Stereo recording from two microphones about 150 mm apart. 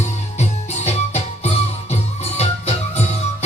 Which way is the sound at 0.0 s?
45° left (ahead or behind).